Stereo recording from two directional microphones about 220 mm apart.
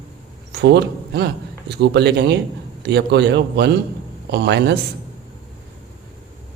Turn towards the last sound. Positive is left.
turn(degrees=-50)  # may be behind; listen again after turning